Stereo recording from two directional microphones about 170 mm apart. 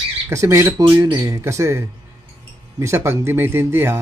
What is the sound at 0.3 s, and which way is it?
Speech, 15° right (ahead or behind).